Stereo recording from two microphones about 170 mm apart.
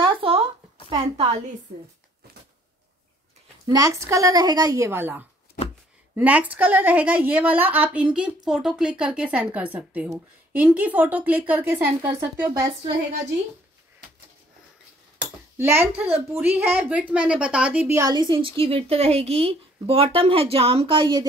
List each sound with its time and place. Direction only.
0.0 s a sound: 35° right (ahead or behind)
0.8 s a woman's voice: 30° right (ahead or behind)
3.6 s a woman's voice: 20° right (ahead or behind)
15.5 s a woman's voice: 15° right (ahead or behind)
17.9 s a woman's voice: 25° right (ahead or behind)